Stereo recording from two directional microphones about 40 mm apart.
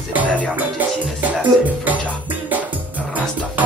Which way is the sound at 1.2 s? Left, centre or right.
Right.